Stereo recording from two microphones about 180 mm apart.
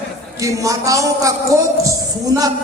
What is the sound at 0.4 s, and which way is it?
A man's voice, 20° right (ahead or behind).